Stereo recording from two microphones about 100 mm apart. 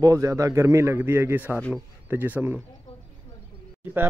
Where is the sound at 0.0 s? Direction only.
35° right (ahead or behind); by 2.6 s 15° right (ahead or behind).